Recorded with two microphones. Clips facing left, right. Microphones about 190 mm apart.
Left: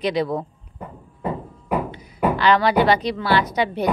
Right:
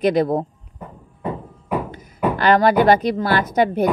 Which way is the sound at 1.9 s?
50° right (ahead or behind).